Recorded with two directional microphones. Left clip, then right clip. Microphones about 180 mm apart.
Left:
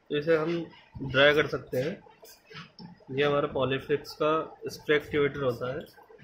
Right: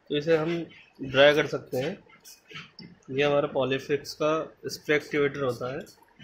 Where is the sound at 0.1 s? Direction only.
20° right (ahead or behind).